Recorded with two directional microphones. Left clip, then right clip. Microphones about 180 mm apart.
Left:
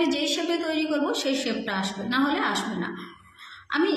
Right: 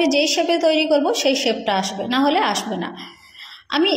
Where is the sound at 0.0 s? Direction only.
30° right (ahead or behind).